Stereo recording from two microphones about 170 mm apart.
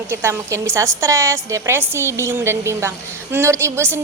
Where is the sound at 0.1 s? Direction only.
15° right (ahead or behind).